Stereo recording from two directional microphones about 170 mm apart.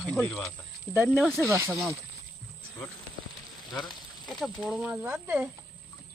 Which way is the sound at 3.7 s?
5° left (ahead or behind).